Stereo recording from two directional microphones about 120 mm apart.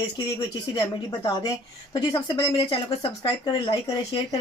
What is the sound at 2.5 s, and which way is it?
Speech, 50° left (ahead or behind).